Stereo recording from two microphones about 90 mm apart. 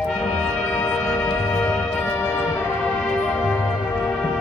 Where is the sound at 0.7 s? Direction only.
20° left (ahead or behind).